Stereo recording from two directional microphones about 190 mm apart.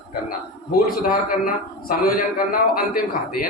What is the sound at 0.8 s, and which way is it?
A man's voice, 50° left (ahead or behind).